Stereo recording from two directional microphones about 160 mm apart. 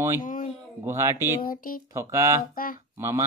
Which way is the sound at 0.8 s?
15° right (ahead or behind).